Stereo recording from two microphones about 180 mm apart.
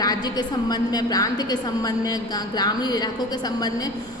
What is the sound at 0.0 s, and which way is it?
A woman's voice, 20° left (ahead or behind).